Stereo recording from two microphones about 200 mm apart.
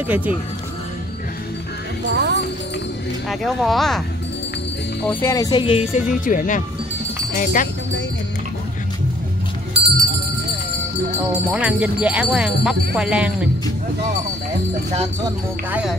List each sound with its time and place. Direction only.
0.0 s speech: 10° right (ahead or behind)
2.0 s music: 60° right (ahead or behind)
3.3 s speech: centre (ahead or behind)
5.0 s speech: 15° left (ahead or behind)
6.2 s speech: 40° left (ahead or behind)
9.8 s bicycle: 55° right (ahead or behind)
11.5 s speech: 5° right (ahead or behind)
15.7 s speech: 5° right (ahead or behind)